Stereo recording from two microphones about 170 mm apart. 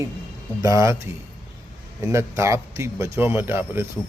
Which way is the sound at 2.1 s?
15° right (ahead or behind).